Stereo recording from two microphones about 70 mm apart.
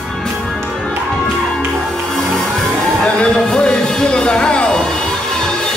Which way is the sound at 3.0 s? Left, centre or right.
Centre.